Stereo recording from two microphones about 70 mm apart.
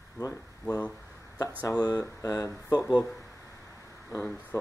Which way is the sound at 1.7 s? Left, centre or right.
Left.